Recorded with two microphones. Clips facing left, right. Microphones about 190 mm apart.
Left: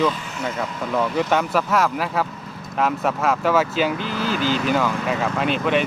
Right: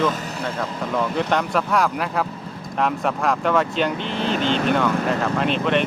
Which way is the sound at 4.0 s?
30° right (ahead or behind).